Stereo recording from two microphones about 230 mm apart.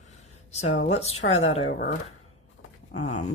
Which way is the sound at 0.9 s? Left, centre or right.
Left.